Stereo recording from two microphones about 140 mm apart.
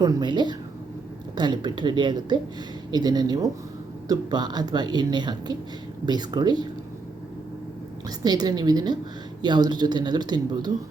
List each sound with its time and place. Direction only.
0.0 s speech: 30° right (ahead or behind)
8.2 s speech: 30° right (ahead or behind)